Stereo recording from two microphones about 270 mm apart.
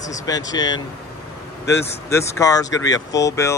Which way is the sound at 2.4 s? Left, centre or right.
Centre.